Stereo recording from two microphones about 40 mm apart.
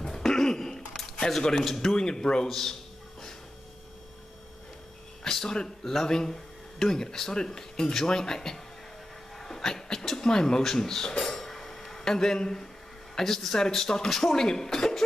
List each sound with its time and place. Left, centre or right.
0.0 s a sound: centre
1.5 s a man's voice: centre
2.0 s speech: centre
5.2 s speech: centre